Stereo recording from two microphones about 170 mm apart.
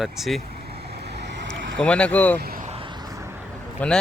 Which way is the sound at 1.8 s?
5° left (ahead or behind).